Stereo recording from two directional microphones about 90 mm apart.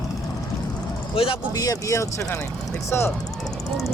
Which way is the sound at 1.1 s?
85° left.